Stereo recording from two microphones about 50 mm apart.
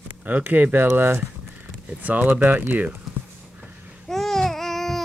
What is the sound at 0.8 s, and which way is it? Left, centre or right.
Speech, right.